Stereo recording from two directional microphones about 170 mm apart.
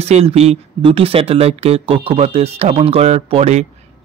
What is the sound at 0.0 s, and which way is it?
Speech, 35° right (ahead or behind).